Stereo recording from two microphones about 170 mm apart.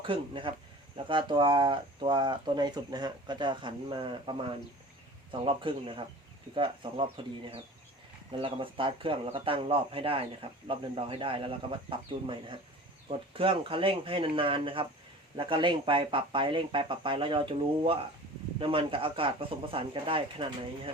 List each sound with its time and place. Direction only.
0.0 s speech: 30° right (ahead or behind)